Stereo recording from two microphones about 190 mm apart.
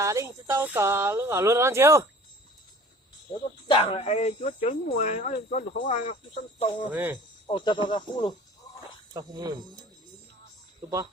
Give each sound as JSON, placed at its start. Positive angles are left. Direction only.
{"t": 0.0, "sound": "speech", "side_deg": -15}
{"t": 3.7, "sound": "speech", "side_deg": 30}
{"t": 6.1, "sound": "speech", "side_deg": 30}
{"t": 6.9, "sound": "speech", "side_deg": -10}
{"t": 7.4, "sound": "speech", "side_deg": 25}
{"t": 9.1, "sound": "speech", "side_deg": -20}